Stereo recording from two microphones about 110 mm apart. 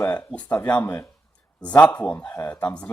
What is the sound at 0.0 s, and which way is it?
Speech, 20° left (ahead or behind).